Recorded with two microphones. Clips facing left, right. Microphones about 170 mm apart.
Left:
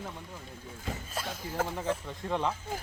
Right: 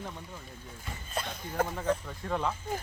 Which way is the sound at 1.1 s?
5° left (ahead or behind).